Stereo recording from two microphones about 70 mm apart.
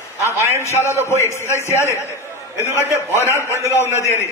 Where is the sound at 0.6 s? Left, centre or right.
Left.